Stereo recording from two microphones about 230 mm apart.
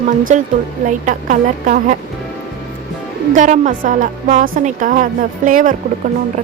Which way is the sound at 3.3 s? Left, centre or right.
Right.